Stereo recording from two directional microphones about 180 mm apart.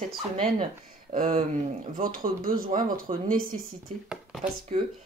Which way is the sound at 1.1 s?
45° right (ahead or behind).